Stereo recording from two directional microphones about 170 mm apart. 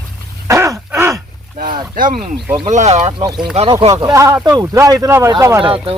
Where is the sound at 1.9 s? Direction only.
55° right (ahead or behind).